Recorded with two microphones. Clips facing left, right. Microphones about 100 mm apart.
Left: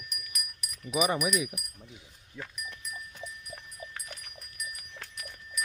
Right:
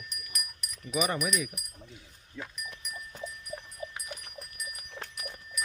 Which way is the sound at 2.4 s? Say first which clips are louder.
Right 1 dB; 10° left (ahead or behind).